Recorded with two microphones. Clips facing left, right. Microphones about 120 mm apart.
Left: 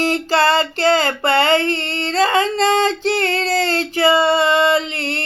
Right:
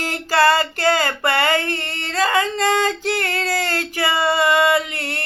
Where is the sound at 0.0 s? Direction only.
25° left (ahead or behind).